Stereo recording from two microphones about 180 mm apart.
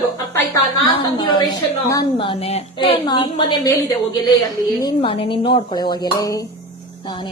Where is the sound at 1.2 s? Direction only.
25° left (ahead or behind).